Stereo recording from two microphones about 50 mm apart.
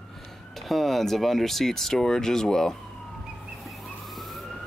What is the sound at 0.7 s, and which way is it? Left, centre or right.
Speech, centre.